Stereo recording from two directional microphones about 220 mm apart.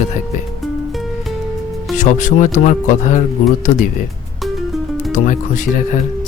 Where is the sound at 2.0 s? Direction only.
35° left (ahead or behind).